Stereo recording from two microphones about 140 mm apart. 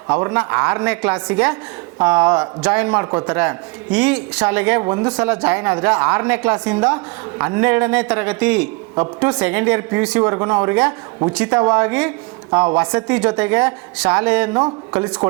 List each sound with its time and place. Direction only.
0.1 s speech: 20° right (ahead or behind)
14.9 s a man's voice: 20° right (ahead or behind)